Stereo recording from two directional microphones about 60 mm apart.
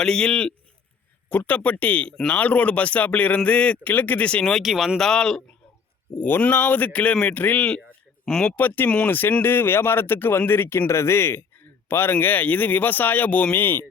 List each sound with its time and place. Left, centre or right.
0.0 s a man's voice: centre
1.3 s speech: left
4.6 s speech: centre
4.9 s a man's voice: centre
6.1 s speech: left; by 8.5 s centre
8.5 s speech: left